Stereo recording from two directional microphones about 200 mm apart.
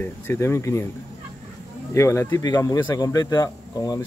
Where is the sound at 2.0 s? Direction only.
15° left (ahead or behind).